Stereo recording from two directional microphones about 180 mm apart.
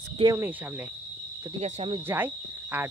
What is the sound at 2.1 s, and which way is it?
Speech, 15° right (ahead or behind).